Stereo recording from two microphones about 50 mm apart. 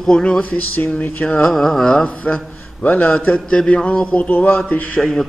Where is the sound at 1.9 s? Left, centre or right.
Centre.